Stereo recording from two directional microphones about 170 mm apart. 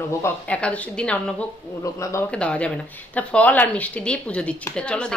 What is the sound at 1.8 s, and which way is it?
Speech, 15° left (ahead or behind).